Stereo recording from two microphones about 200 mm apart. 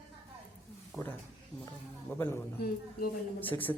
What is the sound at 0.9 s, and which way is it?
Speech, 5° left (ahead or behind).